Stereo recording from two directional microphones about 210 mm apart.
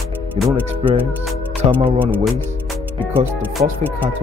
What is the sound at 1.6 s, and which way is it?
Speech, 25° right (ahead or behind).